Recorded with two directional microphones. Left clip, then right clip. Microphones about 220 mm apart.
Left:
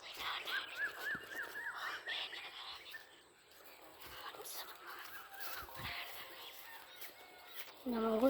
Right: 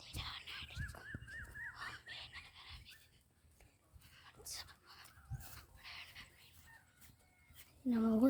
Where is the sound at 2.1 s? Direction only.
15° right (ahead or behind).